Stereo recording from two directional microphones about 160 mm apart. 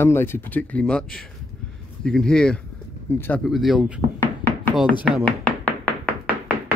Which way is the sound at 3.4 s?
Centre (ahead or behind).